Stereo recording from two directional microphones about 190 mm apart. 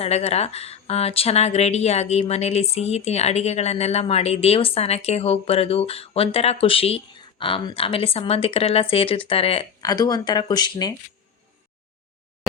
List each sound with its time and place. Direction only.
0.0 s speech: 35° left (ahead or behind)
9.8 s speech: 20° left (ahead or behind)